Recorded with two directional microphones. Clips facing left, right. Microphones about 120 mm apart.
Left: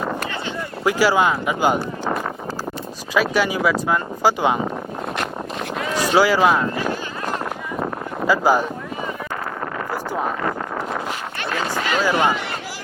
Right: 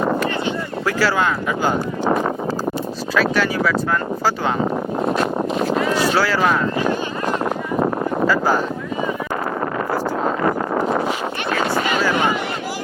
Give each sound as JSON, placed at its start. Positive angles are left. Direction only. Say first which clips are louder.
{"t": 0.9, "sound": "speech", "louder": "left 2 dB", "side_deg": 15}
{"t": 3.2, "sound": "speech", "louder": "even", "side_deg": 10}
{"t": 5.9, "sound": "speech", "louder": "left 1 dB", "side_deg": 15}
{"t": 8.3, "sound": "speech", "louder": "left 4 dB", "side_deg": 10}
{"t": 10.4, "sound": "a sound", "louder": "right 6 dB", "side_deg": -35}